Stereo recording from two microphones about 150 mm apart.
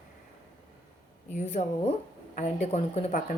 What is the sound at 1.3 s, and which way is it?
Speech, 50° left (ahead or behind).